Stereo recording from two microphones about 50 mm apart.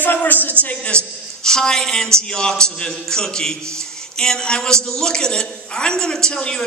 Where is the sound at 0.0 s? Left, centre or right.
Left.